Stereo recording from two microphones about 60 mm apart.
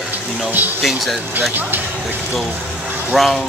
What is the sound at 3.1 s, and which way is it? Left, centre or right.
Speech, centre.